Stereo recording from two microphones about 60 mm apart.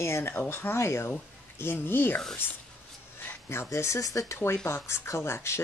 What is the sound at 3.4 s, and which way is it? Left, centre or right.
Speech, left.